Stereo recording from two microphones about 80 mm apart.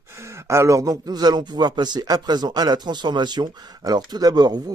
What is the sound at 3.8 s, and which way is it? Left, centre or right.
Speech, right.